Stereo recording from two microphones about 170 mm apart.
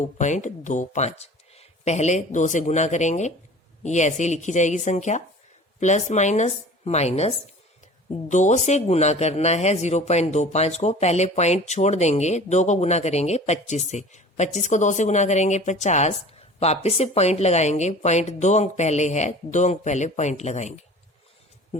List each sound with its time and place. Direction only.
0.0 s a man's voice: 45° left (ahead or behind)